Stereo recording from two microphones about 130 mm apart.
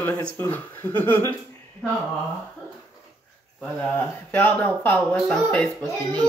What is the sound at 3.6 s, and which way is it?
Speech, 10° left (ahead or behind).